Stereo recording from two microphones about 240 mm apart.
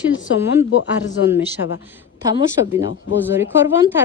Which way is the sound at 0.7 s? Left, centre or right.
Left.